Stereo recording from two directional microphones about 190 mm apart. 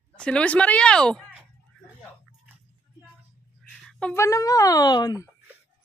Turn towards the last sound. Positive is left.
turn(degrees=20)  # may be behind; listen again after turning